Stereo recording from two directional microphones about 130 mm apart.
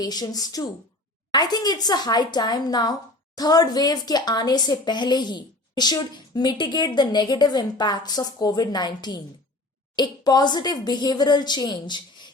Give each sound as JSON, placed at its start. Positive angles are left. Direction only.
{"t": 0.0, "sound": "a woman's voice", "side_deg": 30}